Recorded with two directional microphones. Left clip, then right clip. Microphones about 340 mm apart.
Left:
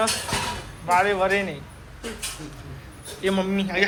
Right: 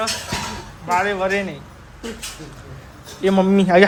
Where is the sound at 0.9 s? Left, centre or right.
Centre.